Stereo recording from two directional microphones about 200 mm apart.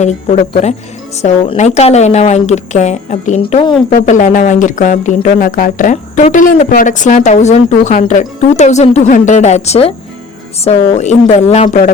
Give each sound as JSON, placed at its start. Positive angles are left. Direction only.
{"t": 0.0, "sound": "speech", "side_deg": 35}
{"t": 3.5, "sound": "speech", "side_deg": 25}
{"t": 3.8, "sound": "speech", "side_deg": 45}